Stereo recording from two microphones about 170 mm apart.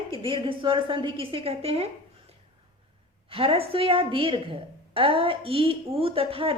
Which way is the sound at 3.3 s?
35° right (ahead or behind).